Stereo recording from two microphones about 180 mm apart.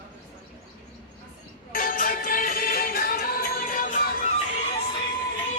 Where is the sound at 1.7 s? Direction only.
50° left (ahead or behind).